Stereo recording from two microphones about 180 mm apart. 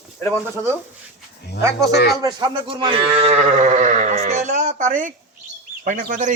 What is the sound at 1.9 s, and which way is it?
Speech, 60° left (ahead or behind).